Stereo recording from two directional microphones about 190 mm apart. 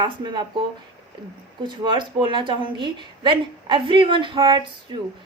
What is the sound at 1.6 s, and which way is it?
A woman's voice, 25° right (ahead or behind).